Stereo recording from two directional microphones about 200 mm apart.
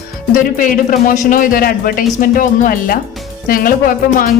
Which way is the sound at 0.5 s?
40° left (ahead or behind).